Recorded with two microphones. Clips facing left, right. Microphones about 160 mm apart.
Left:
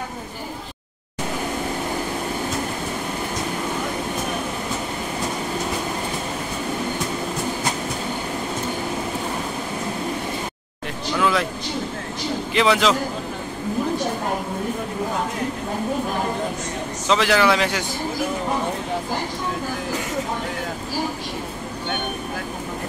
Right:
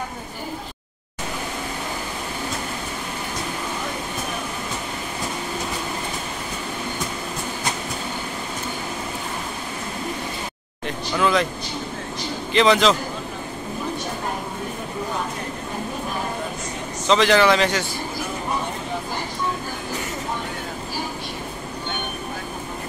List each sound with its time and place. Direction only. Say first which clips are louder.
11.1 s speech: right 1 dB; 5° left (ahead or behind)
12.5 s a man's voice: right 2 dB; 5° left (ahead or behind)
17.1 s a man's voice: right 2 dB; 5° left (ahead or behind)